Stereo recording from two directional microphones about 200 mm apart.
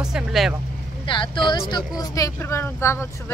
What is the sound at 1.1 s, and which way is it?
Speech, 25° left (ahead or behind).